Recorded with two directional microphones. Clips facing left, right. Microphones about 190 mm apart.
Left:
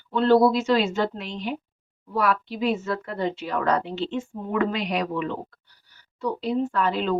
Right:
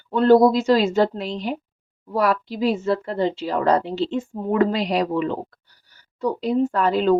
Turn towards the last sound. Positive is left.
turn(degrees=-40)  # may be behind; listen again after turning